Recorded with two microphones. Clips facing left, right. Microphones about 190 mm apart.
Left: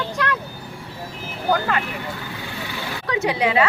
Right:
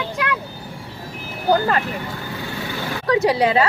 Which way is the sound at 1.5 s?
40° right (ahead or behind).